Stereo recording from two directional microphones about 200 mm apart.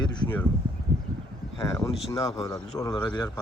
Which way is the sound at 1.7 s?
15° left (ahead or behind).